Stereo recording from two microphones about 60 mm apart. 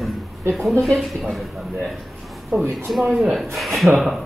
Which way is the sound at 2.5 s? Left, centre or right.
Right.